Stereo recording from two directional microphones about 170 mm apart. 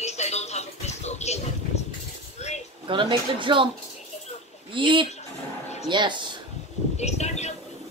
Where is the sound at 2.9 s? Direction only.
30° right (ahead or behind).